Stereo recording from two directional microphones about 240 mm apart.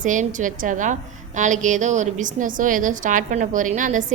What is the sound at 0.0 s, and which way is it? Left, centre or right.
A woman's voice, right.